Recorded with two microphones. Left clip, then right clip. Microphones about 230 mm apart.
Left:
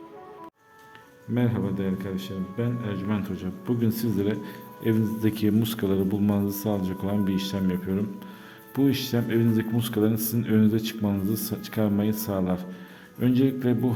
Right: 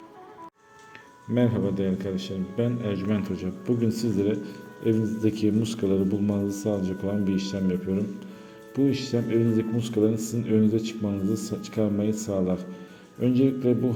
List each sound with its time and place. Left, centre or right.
1.3 s a man's voice: centre; by 13.7 s left